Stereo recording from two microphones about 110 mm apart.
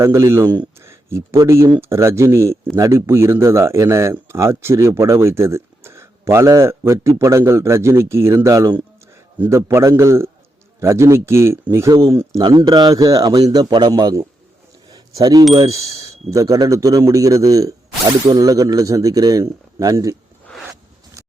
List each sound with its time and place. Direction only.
0.0 s a man's voice: 25° right (ahead or behind)
12.4 s a man's voice: 40° right (ahead or behind)
14.8 s a sound: 35° right (ahead or behind)
15.6 s a man's voice: 30° right (ahead or behind)